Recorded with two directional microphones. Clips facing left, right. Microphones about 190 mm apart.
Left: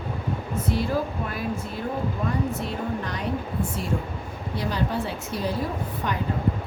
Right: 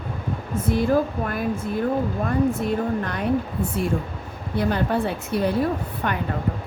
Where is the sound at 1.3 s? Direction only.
50° right (ahead or behind).